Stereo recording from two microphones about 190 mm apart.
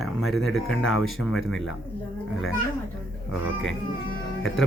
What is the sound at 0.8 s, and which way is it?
Speech, 90° left.